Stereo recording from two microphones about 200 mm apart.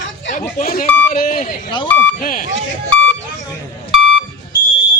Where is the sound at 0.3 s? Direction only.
40° left (ahead or behind).